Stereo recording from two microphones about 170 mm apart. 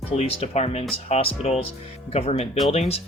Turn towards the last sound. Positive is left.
turn(degrees=35)  # may be behind; listen again after turning